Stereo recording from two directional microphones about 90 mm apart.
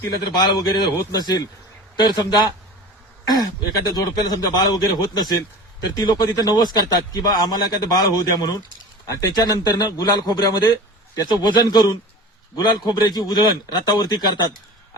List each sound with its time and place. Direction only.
0.3 s a man's voice: 50° left (ahead or behind)